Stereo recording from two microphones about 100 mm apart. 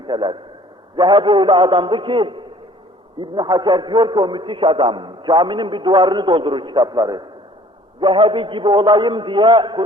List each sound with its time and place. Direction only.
0.0 s a man's voice: 50° right (ahead or behind)
8.0 s a man's voice: 55° right (ahead or behind)